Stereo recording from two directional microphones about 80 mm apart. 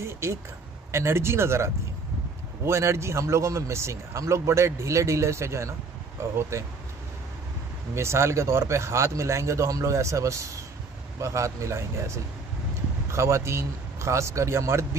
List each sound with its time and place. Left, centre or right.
0.0 s a man's voice: right
7.9 s a man's voice: right